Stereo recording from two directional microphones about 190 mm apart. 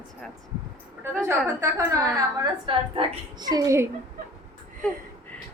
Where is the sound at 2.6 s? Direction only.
30° right (ahead or behind).